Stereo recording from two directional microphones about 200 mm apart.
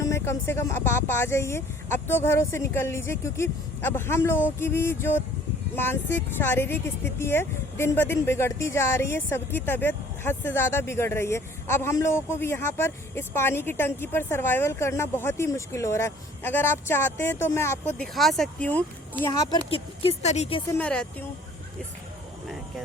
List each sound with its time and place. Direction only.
0.0 s speech: 15° left (ahead or behind)
19.5 s speech: 25° left (ahead or behind)
20.7 s speech: 5° left (ahead or behind)